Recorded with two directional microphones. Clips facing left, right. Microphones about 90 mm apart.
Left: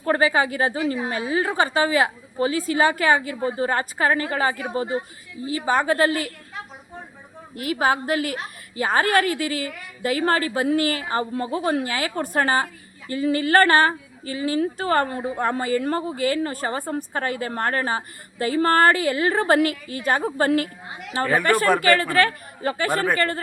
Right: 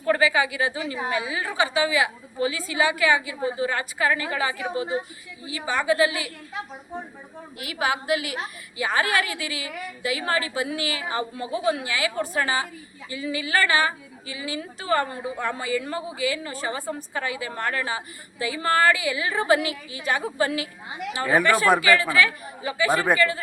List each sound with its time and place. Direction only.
0.0 s a woman's voice: 40° left (ahead or behind)
7.6 s a woman's voice: 40° left (ahead or behind)